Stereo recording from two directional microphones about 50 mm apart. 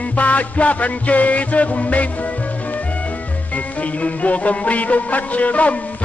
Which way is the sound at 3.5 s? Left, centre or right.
Left.